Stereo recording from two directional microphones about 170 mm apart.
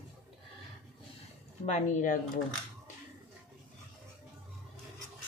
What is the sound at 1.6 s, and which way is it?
Speech, 45° left (ahead or behind).